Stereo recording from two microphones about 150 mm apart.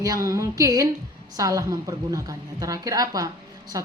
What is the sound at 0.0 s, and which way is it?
A woman's voice, 20° right (ahead or behind).